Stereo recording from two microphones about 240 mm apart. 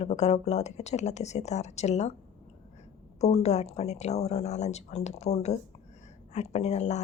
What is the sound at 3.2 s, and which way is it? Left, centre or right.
A woman's voice, left.